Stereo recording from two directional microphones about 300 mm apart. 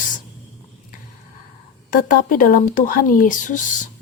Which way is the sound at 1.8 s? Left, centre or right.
Left.